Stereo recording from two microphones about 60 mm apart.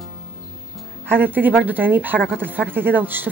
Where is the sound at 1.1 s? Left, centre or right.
Right.